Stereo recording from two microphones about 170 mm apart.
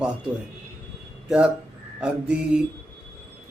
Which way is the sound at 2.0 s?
5° right (ahead or behind).